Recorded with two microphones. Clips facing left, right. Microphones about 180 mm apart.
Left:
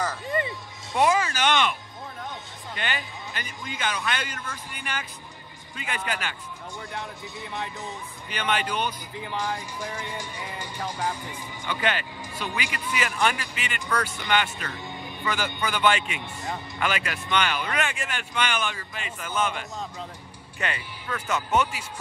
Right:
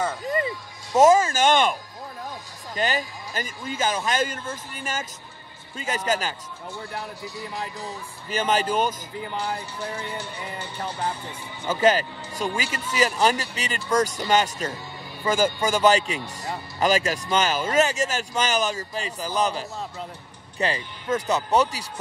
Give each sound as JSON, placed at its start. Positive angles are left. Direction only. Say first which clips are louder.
{"t": 0.9, "sound": "speech", "louder": "right 6 dB", "side_deg": -45}
{"t": 8.3, "sound": "speech", "louder": "right 5 dB", "side_deg": -40}
{"t": 11.6, "sound": "speech", "louder": "right 8 dB", "side_deg": -40}